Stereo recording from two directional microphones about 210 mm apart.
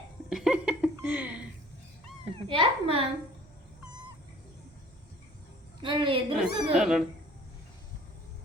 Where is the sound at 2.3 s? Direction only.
25° right (ahead or behind).